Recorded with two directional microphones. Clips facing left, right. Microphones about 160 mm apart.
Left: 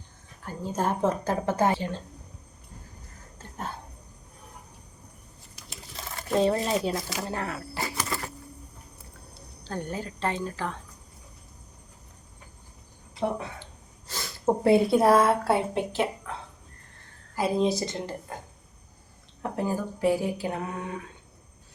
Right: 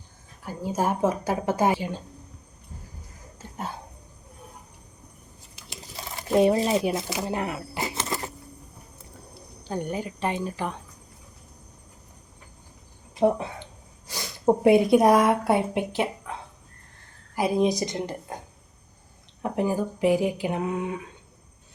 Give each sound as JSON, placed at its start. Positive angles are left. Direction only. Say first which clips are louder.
{"t": 0.4, "sound": "speech", "louder": "right 2 dB", "side_deg": -10}
{"t": 3.3, "sound": "a sound", "louder": "right 2 dB", "side_deg": -10}
{"t": 6.1, "sound": "a sound", "louder": "right 4 dB", "side_deg": -15}
{"t": 6.7, "sound": "speech", "louder": "right 3 dB", "side_deg": -15}
{"t": 9.6, "sound": "speech", "louder": "right 4 dB", "side_deg": -15}
{"t": 13.1, "sound": "a woman's voice", "louder": "right 7 dB", "side_deg": -20}
{"t": 17.3, "sound": "speech", "louder": "right 2 dB", "side_deg": -15}